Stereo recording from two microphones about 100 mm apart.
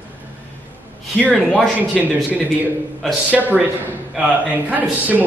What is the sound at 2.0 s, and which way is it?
Speech, centre (ahead or behind).